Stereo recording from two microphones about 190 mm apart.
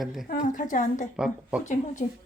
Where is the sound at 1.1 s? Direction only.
5° right (ahead or behind).